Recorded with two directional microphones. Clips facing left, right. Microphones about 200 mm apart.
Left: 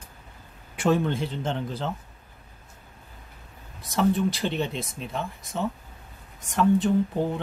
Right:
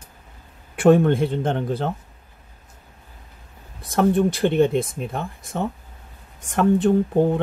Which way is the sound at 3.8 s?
55° right (ahead or behind).